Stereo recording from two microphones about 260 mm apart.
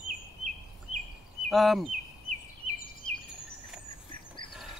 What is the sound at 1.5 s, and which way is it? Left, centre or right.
Speech, centre.